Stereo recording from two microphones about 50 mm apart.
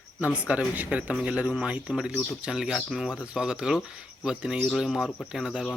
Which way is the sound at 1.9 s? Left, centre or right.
Centre.